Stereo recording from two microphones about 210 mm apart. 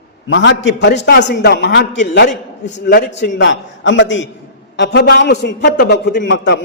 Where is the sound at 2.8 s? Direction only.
55° left (ahead or behind).